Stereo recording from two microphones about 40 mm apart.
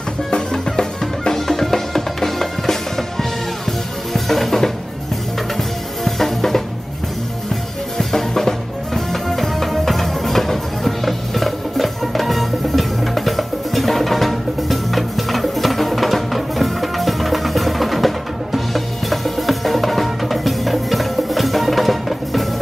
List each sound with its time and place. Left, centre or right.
0.3 s music: centre
6.0 s music: centre
8.0 s music: centre